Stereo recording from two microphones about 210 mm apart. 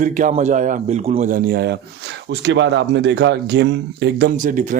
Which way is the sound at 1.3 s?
50° right (ahead or behind).